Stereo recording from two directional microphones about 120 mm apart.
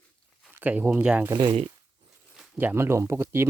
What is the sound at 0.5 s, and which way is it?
Speech, 15° right (ahead or behind).